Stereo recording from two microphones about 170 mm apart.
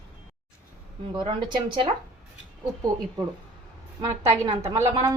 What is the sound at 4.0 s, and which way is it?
A woman's voice, 20° right (ahead or behind).